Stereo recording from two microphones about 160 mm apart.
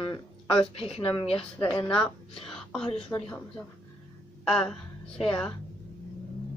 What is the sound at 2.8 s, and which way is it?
Speech, 35° left (ahead or behind).